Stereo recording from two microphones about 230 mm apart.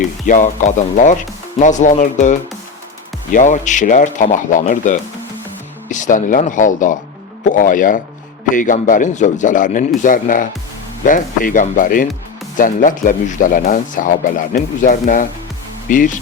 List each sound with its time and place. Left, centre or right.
0.0 s speech: left